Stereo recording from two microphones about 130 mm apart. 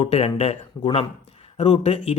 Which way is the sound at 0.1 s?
50° left (ahead or behind).